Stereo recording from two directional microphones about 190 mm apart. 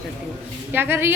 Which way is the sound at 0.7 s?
10° right (ahead or behind).